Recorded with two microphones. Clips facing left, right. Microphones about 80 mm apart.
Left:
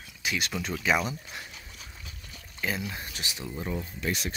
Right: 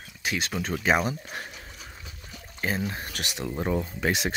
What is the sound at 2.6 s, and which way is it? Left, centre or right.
Speech, right.